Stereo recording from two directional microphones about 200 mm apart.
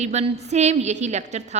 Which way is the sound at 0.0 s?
35° right (ahead or behind).